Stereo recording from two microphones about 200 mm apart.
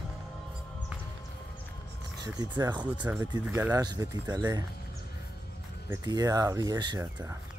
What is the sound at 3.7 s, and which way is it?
Speech, 20° right (ahead or behind).